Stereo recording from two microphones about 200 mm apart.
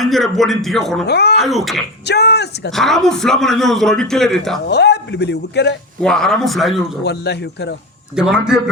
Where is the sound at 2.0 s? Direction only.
55° left (ahead or behind).